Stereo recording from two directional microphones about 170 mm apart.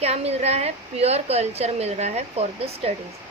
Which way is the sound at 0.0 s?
40° right (ahead or behind).